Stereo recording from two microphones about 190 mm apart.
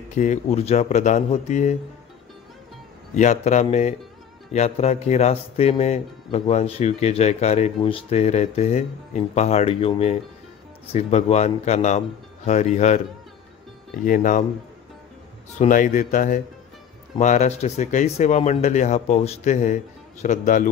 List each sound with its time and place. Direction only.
0.1 s speech: 40° left (ahead or behind)
3.2 s speech: 40° left (ahead or behind)
14.0 s a man's voice: 45° left (ahead or behind)
15.6 s a man's voice: 40° left (ahead or behind)